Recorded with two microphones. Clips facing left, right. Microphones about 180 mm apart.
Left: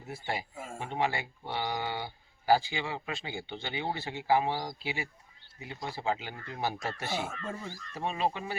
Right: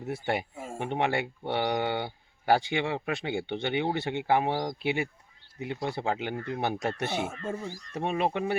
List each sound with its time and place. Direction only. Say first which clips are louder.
0.1 s speech: right 6 dB; 65° right (ahead or behind)
7.4 s speech: right 5 dB; 25° right (ahead or behind)
7.9 s speech: right 4 dB; 60° right (ahead or behind)